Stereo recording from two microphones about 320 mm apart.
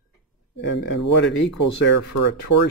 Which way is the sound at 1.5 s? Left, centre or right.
Left.